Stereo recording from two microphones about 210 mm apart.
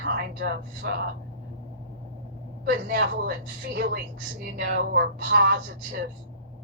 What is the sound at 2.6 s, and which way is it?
Speech, 45° right (ahead or behind).